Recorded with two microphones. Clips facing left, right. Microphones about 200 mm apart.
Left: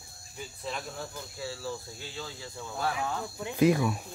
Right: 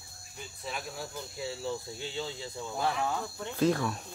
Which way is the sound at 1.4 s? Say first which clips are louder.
Right 2 dB; 20° right (ahead or behind).